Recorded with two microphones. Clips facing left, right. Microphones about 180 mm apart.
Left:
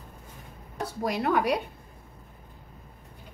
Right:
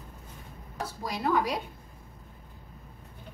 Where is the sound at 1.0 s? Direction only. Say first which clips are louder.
Left 3 dB; 65° left (ahead or behind).